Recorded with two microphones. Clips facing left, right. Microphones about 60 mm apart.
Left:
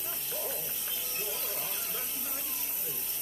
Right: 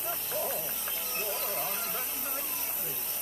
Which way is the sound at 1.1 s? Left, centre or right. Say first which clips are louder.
Right 5 dB; right.